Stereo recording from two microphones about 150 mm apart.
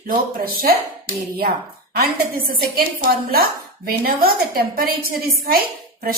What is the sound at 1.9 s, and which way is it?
A woman's voice, 85° right.